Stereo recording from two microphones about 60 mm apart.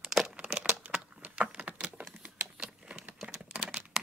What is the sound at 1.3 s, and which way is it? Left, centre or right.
Typing, right.